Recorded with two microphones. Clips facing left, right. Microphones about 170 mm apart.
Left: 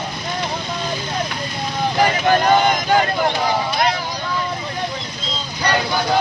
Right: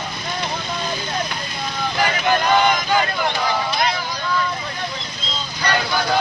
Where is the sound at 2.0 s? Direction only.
40° left (ahead or behind).